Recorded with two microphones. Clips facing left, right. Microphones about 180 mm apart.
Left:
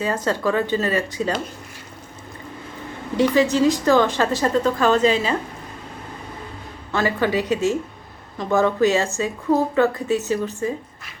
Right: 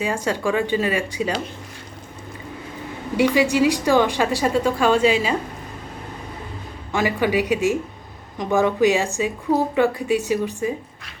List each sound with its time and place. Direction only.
0.0 s a woman's voice: 10° right (ahead or behind)
3.2 s a woman's voice: 10° right (ahead or behind)
6.9 s a woman's voice: 15° right (ahead or behind)